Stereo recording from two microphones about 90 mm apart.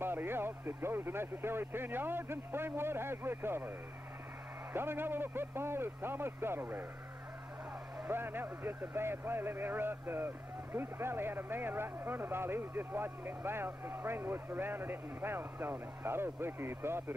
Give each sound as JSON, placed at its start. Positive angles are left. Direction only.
{"t": 0.0, "sound": "speech", "side_deg": -25}
{"t": 4.7, "sound": "speech", "side_deg": -25}
{"t": 8.1, "sound": "speech", "side_deg": -25}